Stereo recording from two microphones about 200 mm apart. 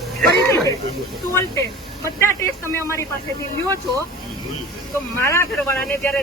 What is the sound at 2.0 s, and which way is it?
A man's voice, 15° left (ahead or behind).